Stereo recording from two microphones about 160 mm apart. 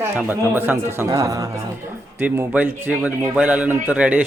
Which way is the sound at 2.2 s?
10° right (ahead or behind).